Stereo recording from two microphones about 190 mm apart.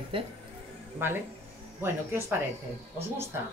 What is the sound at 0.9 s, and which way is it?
A woman's voice, 10° right (ahead or behind).